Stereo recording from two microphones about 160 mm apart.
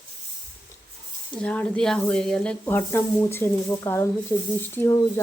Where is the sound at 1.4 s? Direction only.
5° left (ahead or behind).